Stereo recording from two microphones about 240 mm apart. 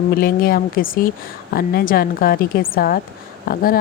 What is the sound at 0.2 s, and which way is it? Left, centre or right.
A woman's voice, left.